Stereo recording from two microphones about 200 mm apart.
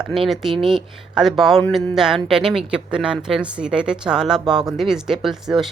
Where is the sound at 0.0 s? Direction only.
Centre (ahead or behind).